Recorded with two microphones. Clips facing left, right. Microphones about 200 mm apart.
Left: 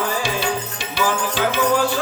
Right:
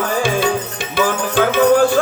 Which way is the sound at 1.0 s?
55° right (ahead or behind).